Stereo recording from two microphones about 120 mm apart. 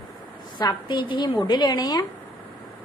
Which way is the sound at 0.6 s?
35° left (ahead or behind).